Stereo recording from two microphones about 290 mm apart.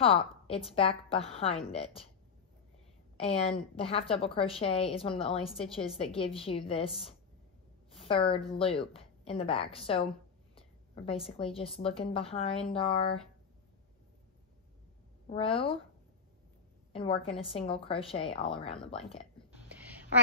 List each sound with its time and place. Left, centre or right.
0.0 s a woman's voice: centre
3.2 s a woman's voice: centre
15.2 s a woman's voice: centre
16.9 s a woman's voice: centre